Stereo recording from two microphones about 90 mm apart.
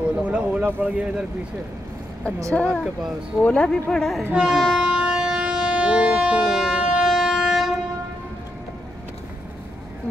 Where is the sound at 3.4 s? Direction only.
10° left (ahead or behind).